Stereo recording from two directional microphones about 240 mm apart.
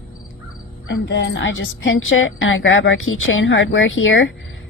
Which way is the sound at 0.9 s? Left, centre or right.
Left.